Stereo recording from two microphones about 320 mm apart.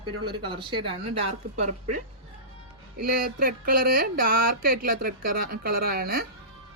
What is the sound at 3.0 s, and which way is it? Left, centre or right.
Speech, right.